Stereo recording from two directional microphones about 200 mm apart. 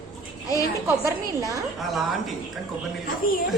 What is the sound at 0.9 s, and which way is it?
Speech, 15° right (ahead or behind).